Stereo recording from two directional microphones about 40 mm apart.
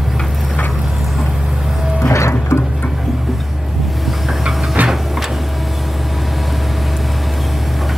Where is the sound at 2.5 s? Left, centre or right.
Left.